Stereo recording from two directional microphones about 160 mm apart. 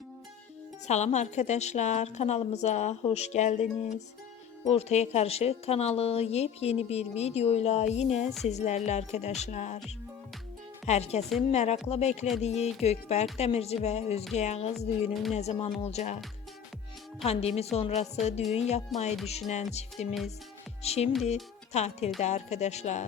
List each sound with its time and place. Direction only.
0.9 s a woman's voice: 45° left (ahead or behind)
10.8 s a woman's voice: 45° left (ahead or behind)
15.1 s speech: centre (ahead or behind)
15.4 s a woman's voice: 40° left (ahead or behind)
17.2 s a woman's voice: 40° left (ahead or behind)
18.9 s speech: centre (ahead or behind)
19.3 s a woman's voice: 45° left (ahead or behind)